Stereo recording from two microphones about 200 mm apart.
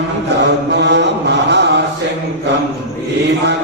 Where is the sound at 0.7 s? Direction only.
60° right (ahead or behind).